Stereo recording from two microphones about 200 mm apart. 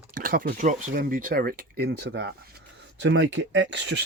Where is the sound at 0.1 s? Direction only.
45° right (ahead or behind).